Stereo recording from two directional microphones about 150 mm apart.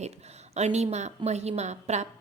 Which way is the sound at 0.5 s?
50° right (ahead or behind).